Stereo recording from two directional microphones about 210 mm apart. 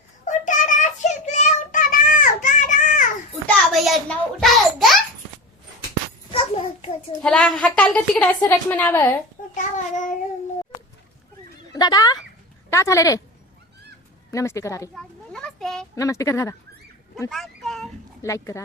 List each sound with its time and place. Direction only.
0.3 s child singing: 35° left (ahead or behind)
3.4 s a sound: centre (ahead or behind)
6.3 s a sound: 25° left (ahead or behind)
7.2 s a woman's voice: 5° left (ahead or behind)
9.6 s child singing: 35° left (ahead or behind)
11.7 s a sound: 20° left (ahead or behind)
12.7 s a woman's voice: 15° left (ahead or behind)
14.3 s a woman's voice: 15° left (ahead or behind)
14.9 s children playing: 5° left (ahead or behind)
16.0 s a woman's voice: 15° left (ahead or behind)
17.2 s a sound: centre (ahead or behind)
18.2 s speech: 15° left (ahead or behind)